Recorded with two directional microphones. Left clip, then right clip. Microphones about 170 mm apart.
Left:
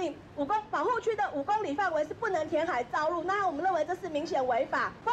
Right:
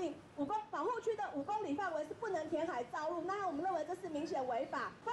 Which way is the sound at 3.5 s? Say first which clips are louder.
Left 9 dB; 15° right (ahead or behind).